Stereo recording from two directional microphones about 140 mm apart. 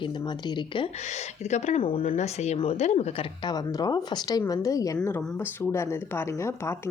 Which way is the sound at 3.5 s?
30° left (ahead or behind).